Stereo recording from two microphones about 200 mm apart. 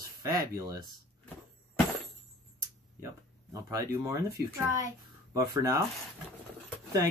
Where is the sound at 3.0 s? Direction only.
15° right (ahead or behind).